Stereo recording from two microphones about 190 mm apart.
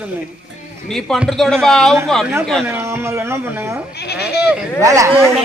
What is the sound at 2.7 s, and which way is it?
Speech, 15° right (ahead or behind).